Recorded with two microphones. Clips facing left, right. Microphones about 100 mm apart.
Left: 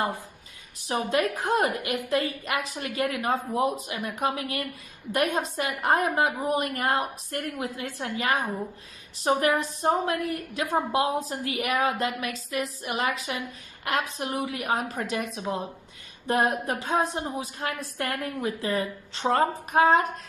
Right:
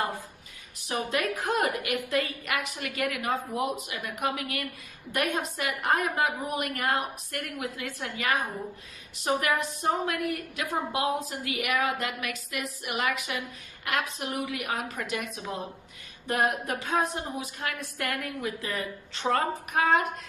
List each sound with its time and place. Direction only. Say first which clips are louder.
0.8 s a woman's voice: left 4 dB; 30° left (ahead or behind)